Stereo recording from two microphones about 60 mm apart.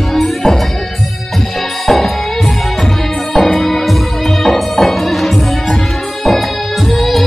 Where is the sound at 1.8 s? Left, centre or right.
Centre.